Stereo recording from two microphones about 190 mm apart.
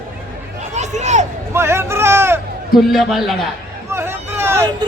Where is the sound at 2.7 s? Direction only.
Centre (ahead or behind).